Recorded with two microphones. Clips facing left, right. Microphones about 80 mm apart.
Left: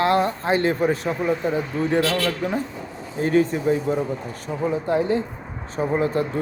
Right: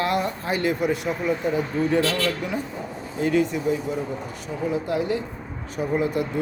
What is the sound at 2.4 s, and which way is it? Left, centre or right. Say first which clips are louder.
Speech: left 3 dB; left.